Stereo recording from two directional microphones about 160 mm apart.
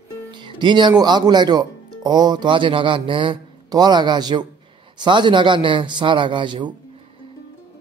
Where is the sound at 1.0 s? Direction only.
25° right (ahead or behind).